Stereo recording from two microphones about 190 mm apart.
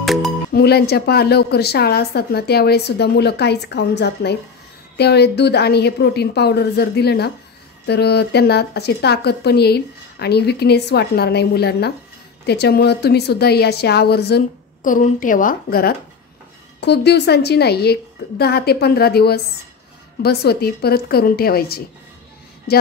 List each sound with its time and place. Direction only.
0.0 s music: centre (ahead or behind)
0.5 s speech: 55° left (ahead or behind)
16.8 s a woman's voice: 60° left (ahead or behind)